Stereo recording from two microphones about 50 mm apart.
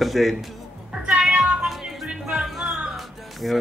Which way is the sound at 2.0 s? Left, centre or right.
Centre.